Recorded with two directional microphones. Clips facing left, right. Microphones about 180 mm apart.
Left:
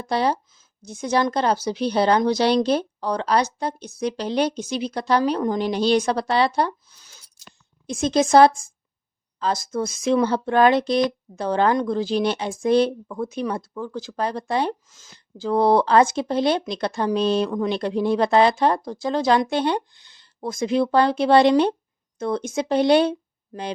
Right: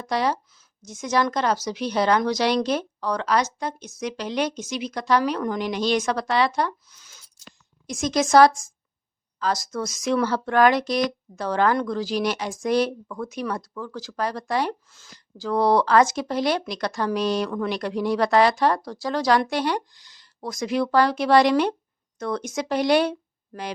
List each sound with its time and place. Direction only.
0.0 s a woman's voice: 30° left (ahead or behind)